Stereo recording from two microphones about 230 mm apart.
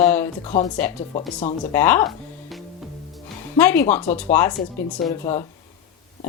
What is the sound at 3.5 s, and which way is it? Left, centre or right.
Speech, centre.